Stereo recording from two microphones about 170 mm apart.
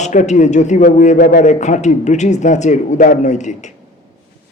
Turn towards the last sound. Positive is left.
turn(degrees=45)  # may be behind; listen again after turning